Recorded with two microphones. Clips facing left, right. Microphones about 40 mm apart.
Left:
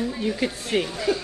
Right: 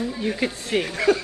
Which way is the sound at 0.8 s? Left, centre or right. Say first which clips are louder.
Right 4 dB; right.